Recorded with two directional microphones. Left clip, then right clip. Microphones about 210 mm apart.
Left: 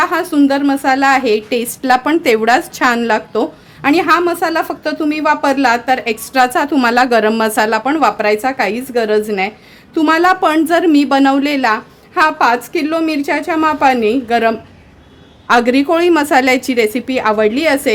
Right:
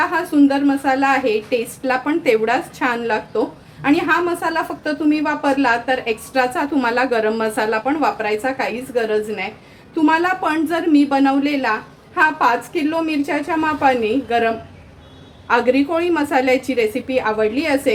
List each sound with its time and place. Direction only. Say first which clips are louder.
0.0 s a woman's voice: left 3 dB; 60° left (ahead or behind)